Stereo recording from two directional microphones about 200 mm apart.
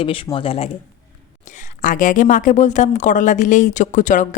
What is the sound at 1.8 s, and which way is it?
A woman's voice, 40° left (ahead or behind).